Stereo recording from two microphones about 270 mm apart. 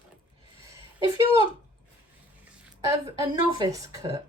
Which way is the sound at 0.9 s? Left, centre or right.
Centre.